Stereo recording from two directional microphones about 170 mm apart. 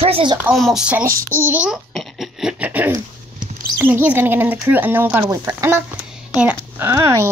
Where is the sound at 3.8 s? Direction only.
10° right (ahead or behind).